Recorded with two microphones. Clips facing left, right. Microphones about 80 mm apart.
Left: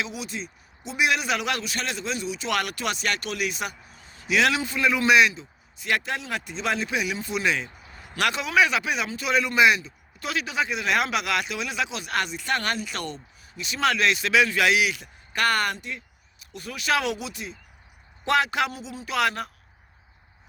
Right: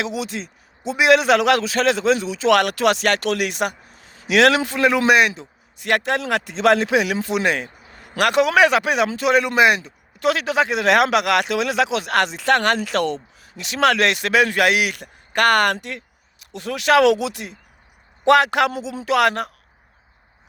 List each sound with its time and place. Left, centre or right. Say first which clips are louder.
0.0 s a man's voice: right 7 dB; right
4.0 s a man's voice: right 7 dB; right
7.4 s speech: right 4 dB; right